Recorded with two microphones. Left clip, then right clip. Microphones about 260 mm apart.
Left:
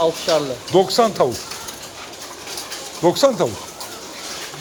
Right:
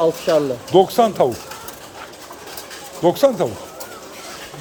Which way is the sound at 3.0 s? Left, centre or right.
Centre.